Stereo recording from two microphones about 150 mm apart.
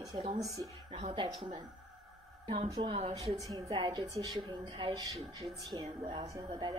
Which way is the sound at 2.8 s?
45° right (ahead or behind).